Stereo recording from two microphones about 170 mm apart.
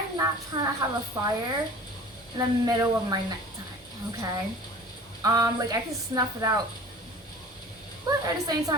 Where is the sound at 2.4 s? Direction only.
20° right (ahead or behind).